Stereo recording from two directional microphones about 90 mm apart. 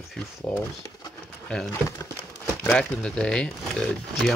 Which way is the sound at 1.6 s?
40° left (ahead or behind).